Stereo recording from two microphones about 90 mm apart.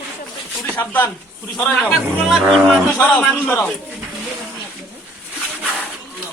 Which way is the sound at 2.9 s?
15° left (ahead or behind).